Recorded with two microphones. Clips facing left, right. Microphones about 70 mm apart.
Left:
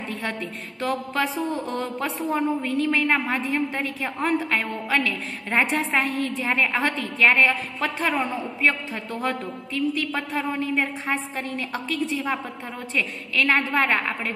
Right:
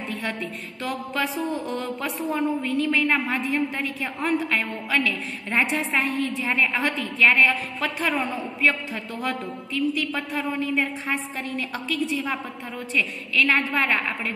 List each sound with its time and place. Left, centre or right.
0.2 s speech: left